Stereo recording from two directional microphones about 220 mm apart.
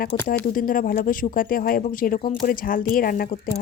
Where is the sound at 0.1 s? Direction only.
40° left (ahead or behind).